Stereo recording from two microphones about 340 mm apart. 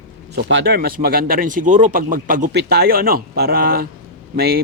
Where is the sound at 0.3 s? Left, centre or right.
Right.